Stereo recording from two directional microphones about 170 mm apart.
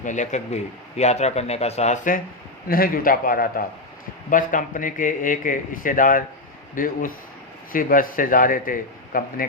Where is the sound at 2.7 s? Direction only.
60° left (ahead or behind).